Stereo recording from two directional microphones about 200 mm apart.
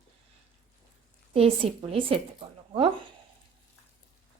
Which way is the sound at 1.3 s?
30° right (ahead or behind).